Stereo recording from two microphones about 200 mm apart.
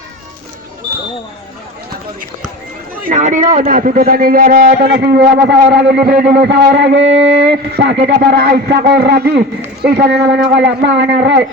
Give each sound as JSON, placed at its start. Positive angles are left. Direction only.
{"t": 3.0, "sound": "a man's voice", "side_deg": -40}